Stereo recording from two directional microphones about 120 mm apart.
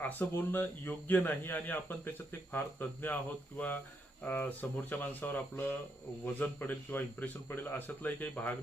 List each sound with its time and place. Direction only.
0.0 s a man's voice: 15° left (ahead or behind)
4.2 s a man's voice: 15° left (ahead or behind)